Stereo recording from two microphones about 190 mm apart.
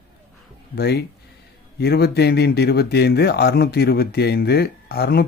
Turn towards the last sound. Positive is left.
turn(degrees=55)  # may be behind; listen again after turning